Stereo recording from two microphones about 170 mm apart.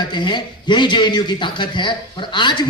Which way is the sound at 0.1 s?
25° left (ahead or behind).